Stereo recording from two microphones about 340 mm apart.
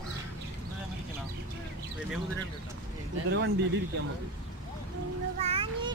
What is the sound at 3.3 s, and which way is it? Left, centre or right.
Speech, right.